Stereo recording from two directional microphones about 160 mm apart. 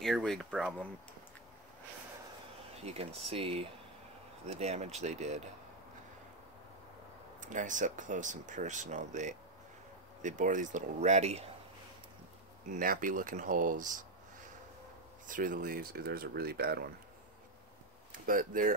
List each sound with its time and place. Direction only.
0.0 s speech: centre (ahead or behind)
2.8 s speech: 40° right (ahead or behind)
7.3 s speech: 55° right (ahead or behind)
12.6 s speech: 60° right (ahead or behind); by 16.9 s 75° right (ahead or behind)
18.1 s speech: 60° right (ahead or behind)